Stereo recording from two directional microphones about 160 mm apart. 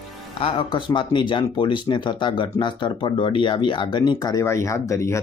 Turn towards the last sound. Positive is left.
turn(degrees=20)  # may be behind; listen again after turning